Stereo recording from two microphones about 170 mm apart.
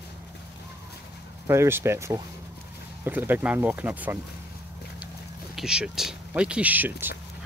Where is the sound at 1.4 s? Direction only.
15° right (ahead or behind).